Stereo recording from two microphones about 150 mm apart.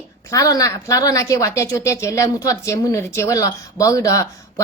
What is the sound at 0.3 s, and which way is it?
A woman's voice, 25° left (ahead or behind).